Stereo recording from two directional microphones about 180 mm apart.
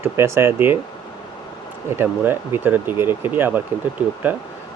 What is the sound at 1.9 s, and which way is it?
Speech, 10° right (ahead or behind).